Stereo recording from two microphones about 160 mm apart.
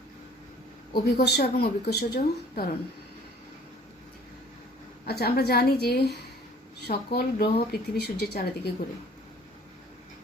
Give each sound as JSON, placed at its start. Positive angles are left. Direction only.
{"t": 0.9, "sound": "a woman's voice", "side_deg": 75}
{"t": 5.0, "sound": "a woman's voice", "side_deg": 85}
{"t": 7.7, "sound": "a woman's voice", "side_deg": 85}